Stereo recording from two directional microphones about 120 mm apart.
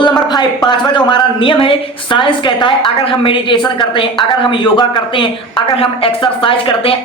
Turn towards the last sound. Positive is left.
turn(degrees=45)  # may be behind; listen again after turning